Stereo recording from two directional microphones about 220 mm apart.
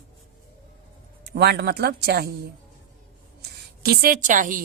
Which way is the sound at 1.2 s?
45° right (ahead or behind).